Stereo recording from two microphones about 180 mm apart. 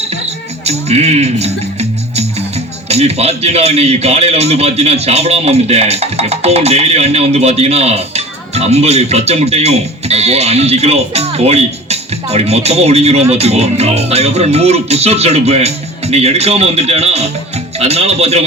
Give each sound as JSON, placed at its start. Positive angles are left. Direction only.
{"t": 0.6, "sound": "music", "side_deg": -35}
{"t": 2.9, "sound": "a man's voice", "side_deg": -35}